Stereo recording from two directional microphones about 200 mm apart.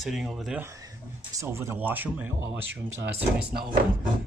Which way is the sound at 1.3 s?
15° right (ahead or behind).